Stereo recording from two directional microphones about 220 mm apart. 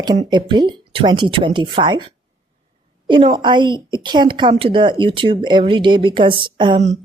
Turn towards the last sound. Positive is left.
turn(degrees=-25)  # may be behind; listen again after turning